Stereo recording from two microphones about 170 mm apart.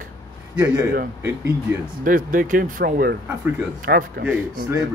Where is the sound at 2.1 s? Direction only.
55° right (ahead or behind).